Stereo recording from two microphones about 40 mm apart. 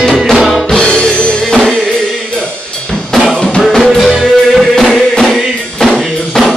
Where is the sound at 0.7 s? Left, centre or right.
Left.